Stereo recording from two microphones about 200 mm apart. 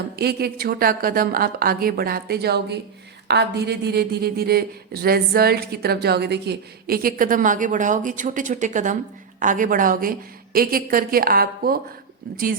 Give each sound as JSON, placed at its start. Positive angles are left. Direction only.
{"t": 0.2, "sound": "a woman's voice", "side_deg": -50}